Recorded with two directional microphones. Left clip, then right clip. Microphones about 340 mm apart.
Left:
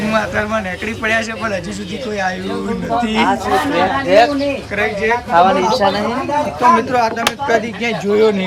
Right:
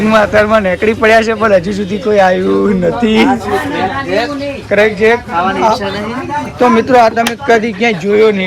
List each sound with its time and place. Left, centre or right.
0.1 s speech: centre
4.7 s speech: centre
5.4 s speech: left
6.6 s speech: centre